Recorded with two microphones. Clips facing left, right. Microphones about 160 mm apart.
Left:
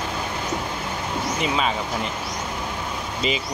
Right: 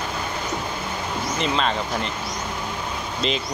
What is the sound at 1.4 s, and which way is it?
Speech, 10° left (ahead or behind).